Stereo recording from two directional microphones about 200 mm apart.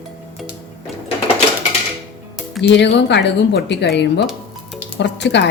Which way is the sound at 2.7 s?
60° left (ahead or behind).